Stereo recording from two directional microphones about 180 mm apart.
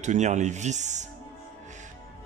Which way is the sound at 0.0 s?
40° right (ahead or behind).